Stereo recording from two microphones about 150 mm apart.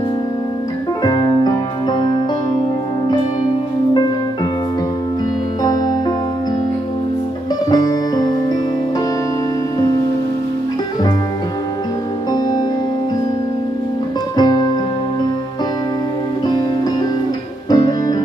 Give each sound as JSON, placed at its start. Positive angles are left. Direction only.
{"t": 1.0, "sound": "music", "side_deg": 30}
{"t": 5.6, "sound": "music", "side_deg": 25}
{"t": 7.7, "sound": "music", "side_deg": 25}
{"t": 12.3, "sound": "music", "side_deg": 30}
{"t": 14.3, "sound": "music", "side_deg": 25}
{"t": 16.4, "sound": "music", "side_deg": 25}